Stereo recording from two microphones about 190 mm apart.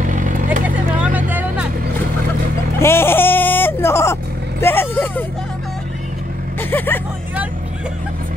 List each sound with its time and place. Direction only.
0.0 s vehicle: 45° right (ahead or behind)
0.7 s vehicle: 10° right (ahead or behind)
2.8 s vehicle: 10° left (ahead or behind)
6.7 s speech: 10° left (ahead or behind)